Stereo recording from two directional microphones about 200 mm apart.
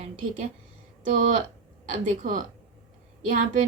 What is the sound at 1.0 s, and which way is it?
A woman's voice, 40° right (ahead or behind).